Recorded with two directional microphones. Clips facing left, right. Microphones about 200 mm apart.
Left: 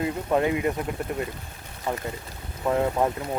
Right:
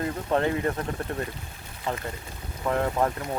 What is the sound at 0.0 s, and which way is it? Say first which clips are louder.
Speech: left 2 dB; 15° left (ahead or behind).